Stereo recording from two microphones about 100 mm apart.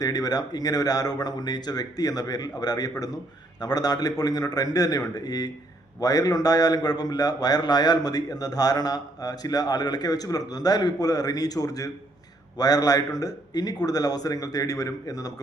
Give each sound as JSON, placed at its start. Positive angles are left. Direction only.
{"t": 0.0, "sound": "a man's voice", "side_deg": 40}